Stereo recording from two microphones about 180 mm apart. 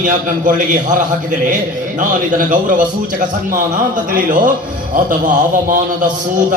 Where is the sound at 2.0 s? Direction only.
50° right (ahead or behind).